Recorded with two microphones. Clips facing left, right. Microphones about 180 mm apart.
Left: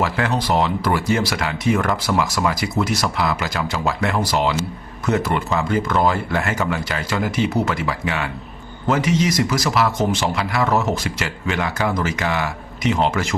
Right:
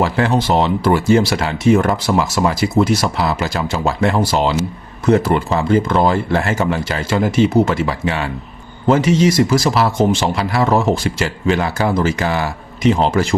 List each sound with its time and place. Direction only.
0.0 s speech: 30° right (ahead or behind)